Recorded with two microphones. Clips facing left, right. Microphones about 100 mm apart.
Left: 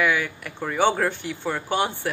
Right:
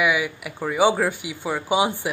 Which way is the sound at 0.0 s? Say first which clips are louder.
Right 1 dB; 10° right (ahead or behind).